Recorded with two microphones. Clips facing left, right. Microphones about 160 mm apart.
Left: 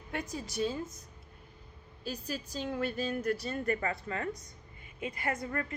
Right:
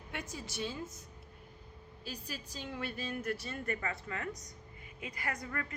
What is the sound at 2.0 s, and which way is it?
A woman's voice, 45° left (ahead or behind).